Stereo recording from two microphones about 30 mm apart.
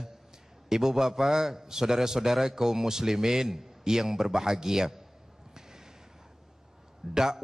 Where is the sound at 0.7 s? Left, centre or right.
Centre.